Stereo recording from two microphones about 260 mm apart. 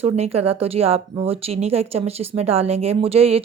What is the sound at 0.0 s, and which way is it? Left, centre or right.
Speech, right.